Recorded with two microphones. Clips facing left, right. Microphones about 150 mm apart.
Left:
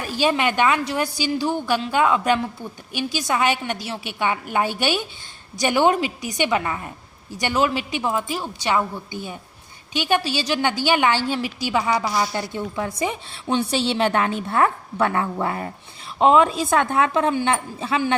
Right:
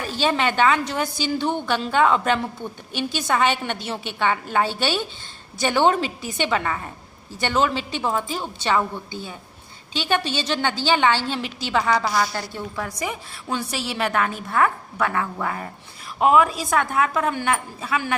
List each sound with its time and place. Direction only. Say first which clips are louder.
0.0 s a woman's voice: left 1 dB; 10° left (ahead or behind); by 18.2 s 30° left (ahead or behind)